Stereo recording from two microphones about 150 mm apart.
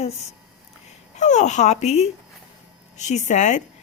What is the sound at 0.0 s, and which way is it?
A woman's voice, 45° left (ahead or behind).